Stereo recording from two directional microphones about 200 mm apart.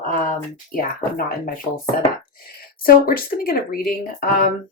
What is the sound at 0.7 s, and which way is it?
Speech, 45° left (ahead or behind).